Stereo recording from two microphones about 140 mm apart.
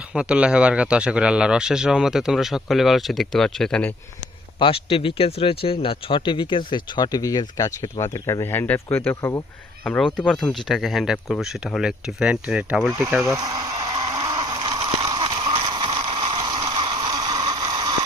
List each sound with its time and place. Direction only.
0.1 s a man's voice: 5° right (ahead or behind)
4.6 s a man's voice: 40° left (ahead or behind); by 13.2 s 15° right (ahead or behind)
13.4 s speech: 30° right (ahead or behind)
13.8 s a sound: 30° right (ahead or behind)